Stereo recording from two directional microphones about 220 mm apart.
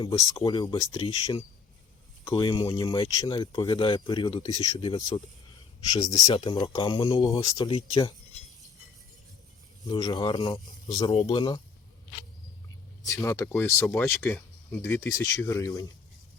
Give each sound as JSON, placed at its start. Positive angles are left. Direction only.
{"t": 0.0, "sound": "speech", "side_deg": 20}
{"t": 0.9, "sound": "speech", "side_deg": 25}
{"t": 9.8, "sound": "speech", "side_deg": 20}
{"t": 13.0, "sound": "speech", "side_deg": 15}